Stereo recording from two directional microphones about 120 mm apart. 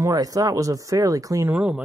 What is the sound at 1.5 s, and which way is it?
Speech, 10° right (ahead or behind).